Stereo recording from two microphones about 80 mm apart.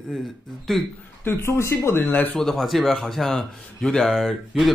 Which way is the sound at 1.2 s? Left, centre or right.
Left.